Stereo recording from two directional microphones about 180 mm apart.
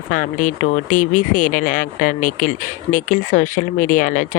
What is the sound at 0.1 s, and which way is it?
Speech, 45° left (ahead or behind).